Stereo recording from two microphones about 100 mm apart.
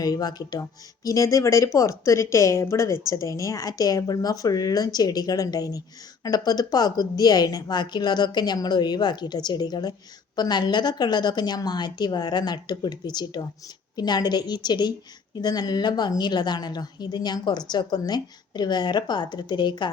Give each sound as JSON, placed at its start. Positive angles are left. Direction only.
{"t": 0.0, "sound": "speech", "side_deg": 40}